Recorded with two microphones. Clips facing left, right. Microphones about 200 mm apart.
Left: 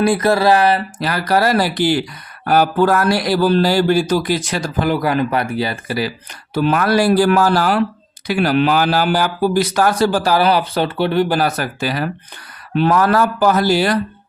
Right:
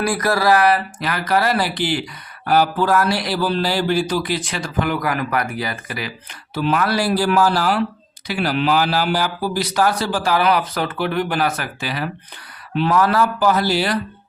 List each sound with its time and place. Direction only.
0.0 s speech: 25° left (ahead or behind)
6.5 s speech: 50° left (ahead or behind)